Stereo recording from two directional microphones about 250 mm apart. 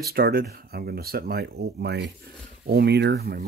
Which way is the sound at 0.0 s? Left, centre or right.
Right.